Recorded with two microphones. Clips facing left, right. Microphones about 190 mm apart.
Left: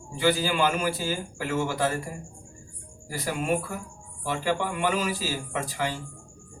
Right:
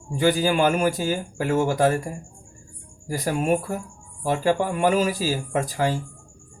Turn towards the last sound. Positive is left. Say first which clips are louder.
# right 6 dB
turn(degrees=-40)  # may be behind; listen again after turning